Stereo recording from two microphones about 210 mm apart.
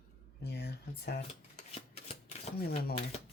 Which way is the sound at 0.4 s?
50° left (ahead or behind).